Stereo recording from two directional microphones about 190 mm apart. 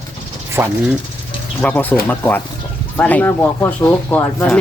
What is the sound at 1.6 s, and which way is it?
Speech, 10° left (ahead or behind).